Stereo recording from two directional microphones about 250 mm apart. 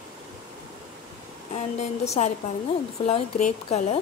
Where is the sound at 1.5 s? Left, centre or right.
Left.